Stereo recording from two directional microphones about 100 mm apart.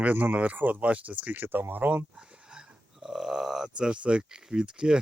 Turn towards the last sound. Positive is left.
turn(degrees=-10)  # may be behind; listen again after turning